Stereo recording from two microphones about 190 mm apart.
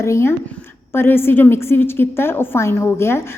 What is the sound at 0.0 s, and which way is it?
A woman's voice, 15° left (ahead or behind).